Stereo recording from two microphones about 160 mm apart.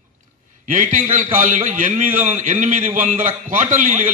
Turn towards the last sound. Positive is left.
turn(degrees=-55)  # may be behind; listen again after turning